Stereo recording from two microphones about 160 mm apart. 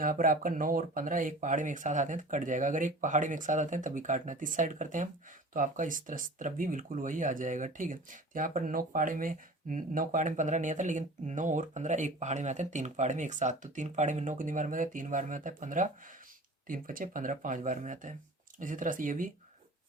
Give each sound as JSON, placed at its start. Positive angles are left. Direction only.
{"t": 0.0, "sound": "speech", "side_deg": -60}